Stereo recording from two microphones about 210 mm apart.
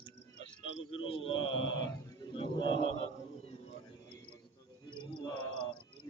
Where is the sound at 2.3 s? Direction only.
25° left (ahead or behind).